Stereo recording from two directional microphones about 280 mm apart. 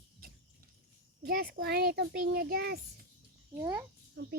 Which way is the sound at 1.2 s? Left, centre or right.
Right.